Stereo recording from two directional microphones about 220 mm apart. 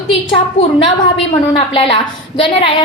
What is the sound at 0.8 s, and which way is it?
A woman's voice, 25° left (ahead or behind).